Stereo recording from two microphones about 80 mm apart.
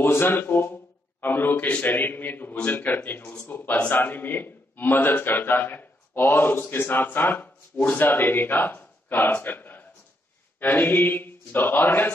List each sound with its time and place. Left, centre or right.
0.0 s mantra: left
1.2 s a man's voice: left